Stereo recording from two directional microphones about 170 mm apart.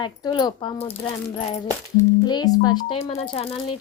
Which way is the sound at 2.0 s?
25° left (ahead or behind).